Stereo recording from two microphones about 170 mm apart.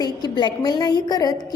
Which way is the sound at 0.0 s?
25° left (ahead or behind).